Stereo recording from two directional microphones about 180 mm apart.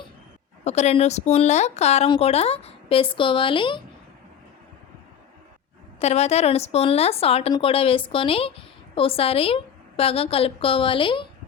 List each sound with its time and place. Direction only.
0.6 s speech: 35° left (ahead or behind)
6.0 s speech: 35° left (ahead or behind)